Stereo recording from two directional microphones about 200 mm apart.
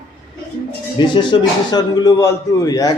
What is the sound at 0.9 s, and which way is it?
A man's voice, 25° left (ahead or behind).